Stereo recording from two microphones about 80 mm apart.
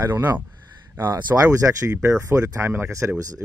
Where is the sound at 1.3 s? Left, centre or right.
Right.